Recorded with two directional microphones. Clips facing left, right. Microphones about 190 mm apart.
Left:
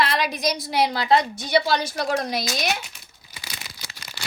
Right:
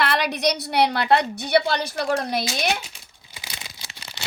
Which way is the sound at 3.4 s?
20° right (ahead or behind).